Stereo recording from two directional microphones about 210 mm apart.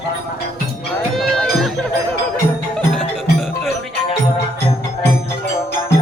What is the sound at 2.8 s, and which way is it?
Music, centre (ahead or behind).